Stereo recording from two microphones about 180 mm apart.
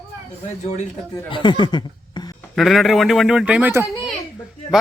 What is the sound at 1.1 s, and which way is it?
Speech, 25° left (ahead or behind).